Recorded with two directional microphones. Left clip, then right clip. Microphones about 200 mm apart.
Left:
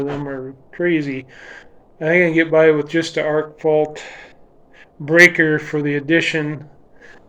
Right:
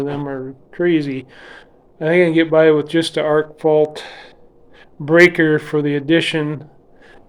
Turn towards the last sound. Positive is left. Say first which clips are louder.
# right 1 dB
turn(degrees=-25)  # may be behind; listen again after turning